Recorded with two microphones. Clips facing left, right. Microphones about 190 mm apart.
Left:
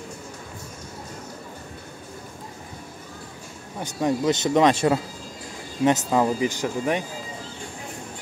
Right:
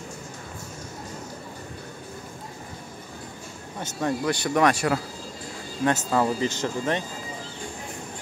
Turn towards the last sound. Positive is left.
turn(degrees=10)  # may be behind; listen again after turning